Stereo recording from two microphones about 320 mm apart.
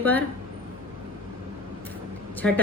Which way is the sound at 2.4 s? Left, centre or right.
Centre.